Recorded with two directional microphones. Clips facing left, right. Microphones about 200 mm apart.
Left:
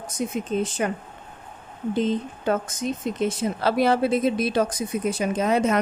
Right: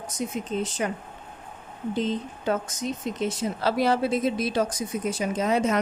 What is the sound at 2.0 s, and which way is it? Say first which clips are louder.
Speech: left 4 dB; 55° left (ahead or behind).